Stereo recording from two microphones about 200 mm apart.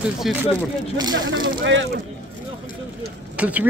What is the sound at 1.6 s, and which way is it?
Speech, 65° right (ahead or behind).